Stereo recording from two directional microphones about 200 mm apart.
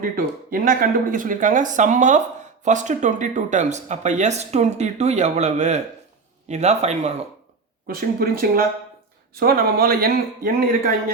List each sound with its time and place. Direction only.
0.0 s speech: 45° right (ahead or behind)
7.9 s speech: 50° right (ahead or behind)